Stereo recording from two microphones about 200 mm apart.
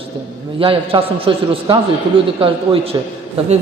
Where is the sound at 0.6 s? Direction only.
25° right (ahead or behind).